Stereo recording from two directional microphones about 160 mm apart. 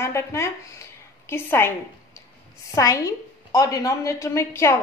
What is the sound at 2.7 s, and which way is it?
A woman's voice, 20° left (ahead or behind).